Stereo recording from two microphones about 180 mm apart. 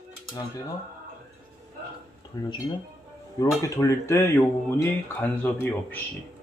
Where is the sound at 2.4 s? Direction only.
20° left (ahead or behind).